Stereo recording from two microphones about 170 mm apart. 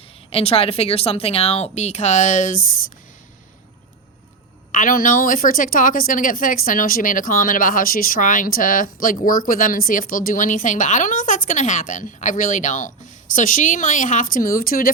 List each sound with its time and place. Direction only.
0.3 s speech: 35° left (ahead or behind)
4.7 s a woman's voice: 50° left (ahead or behind)